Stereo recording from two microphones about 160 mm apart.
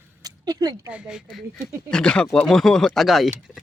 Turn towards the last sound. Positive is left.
turn(degrees=-5)  # may be behind; listen again after turning